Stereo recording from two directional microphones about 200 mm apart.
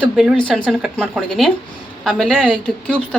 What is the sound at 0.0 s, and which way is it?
Speech, 5° right (ahead or behind).